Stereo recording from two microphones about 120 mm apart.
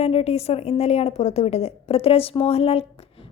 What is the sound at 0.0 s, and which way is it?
A woman's voice, 55° left (ahead or behind).